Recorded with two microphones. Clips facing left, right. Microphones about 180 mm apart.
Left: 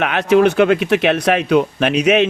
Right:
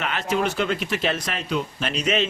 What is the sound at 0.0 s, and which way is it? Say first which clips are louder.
Speech: left 11 dB; 65° left (ahead or behind).